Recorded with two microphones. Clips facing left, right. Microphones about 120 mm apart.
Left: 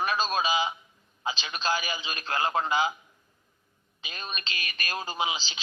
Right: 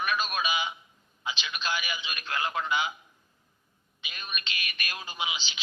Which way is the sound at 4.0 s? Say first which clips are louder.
Left 2 dB; 35° left (ahead or behind).